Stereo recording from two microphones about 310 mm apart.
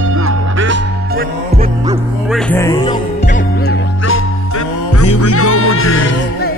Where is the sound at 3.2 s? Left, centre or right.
Left.